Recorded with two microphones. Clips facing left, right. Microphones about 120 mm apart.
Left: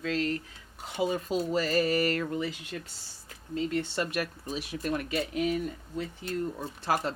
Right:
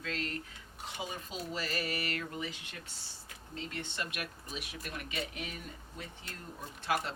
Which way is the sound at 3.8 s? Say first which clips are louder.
Left 9 dB; 40° left (ahead or behind).